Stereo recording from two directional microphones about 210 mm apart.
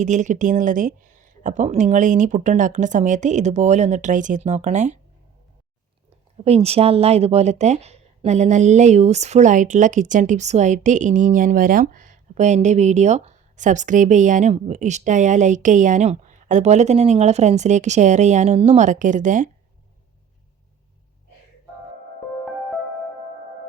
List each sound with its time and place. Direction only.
0.0 s a woman's voice: 35° right (ahead or behind)
6.4 s a woman's voice: 30° right (ahead or behind)